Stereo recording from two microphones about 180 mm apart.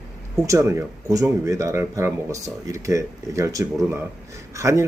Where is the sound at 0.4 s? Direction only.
15° right (ahead or behind).